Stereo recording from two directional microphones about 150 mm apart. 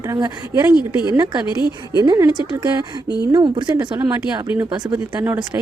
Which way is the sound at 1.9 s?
25° right (ahead or behind).